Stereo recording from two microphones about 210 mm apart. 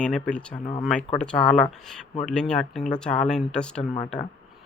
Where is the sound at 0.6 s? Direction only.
40° left (ahead or behind).